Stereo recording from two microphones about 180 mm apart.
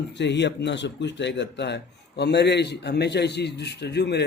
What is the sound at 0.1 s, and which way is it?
Speech, 75° left (ahead or behind).